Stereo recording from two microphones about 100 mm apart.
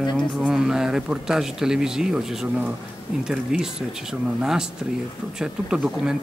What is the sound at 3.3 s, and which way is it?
Speech, 5° right (ahead or behind).